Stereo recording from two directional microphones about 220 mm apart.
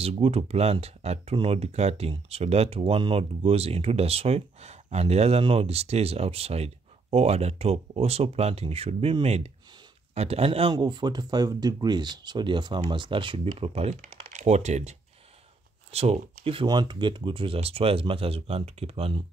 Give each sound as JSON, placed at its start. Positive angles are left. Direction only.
{"t": 0.0, "sound": "speech", "side_deg": -25}